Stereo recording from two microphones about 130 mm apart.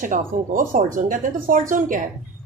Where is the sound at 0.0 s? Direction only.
90° right.